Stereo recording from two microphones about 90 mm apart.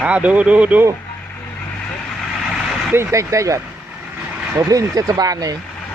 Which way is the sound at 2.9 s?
30° right (ahead or behind).